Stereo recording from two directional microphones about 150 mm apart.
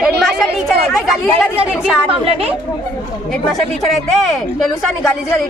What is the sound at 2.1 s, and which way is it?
Speech, 40° right (ahead or behind).